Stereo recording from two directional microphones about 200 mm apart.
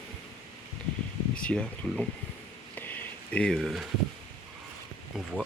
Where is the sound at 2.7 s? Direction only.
10° left (ahead or behind).